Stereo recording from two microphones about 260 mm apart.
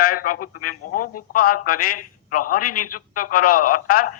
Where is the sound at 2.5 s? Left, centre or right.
Left.